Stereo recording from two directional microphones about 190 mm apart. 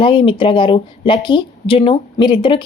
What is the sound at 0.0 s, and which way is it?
Speech, 25° left (ahead or behind).